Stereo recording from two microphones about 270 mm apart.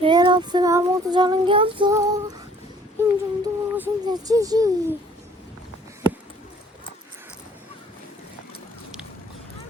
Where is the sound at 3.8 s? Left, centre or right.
Centre.